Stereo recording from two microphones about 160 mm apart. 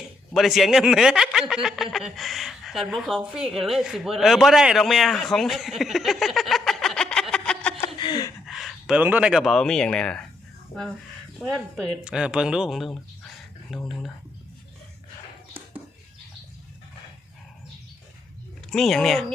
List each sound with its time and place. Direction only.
0.3 s speech: centre (ahead or behind)
7.9 s a sound: 30° left (ahead or behind)
8.4 s speech: centre (ahead or behind)
11.3 s speech: centre (ahead or behind)
18.7 s speech: 5° left (ahead or behind)